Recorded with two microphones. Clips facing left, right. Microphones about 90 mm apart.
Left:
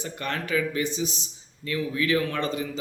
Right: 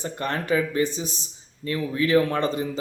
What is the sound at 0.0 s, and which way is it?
A man's voice, 35° right (ahead or behind).